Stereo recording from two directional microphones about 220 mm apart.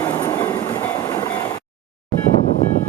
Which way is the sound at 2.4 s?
30° left (ahead or behind).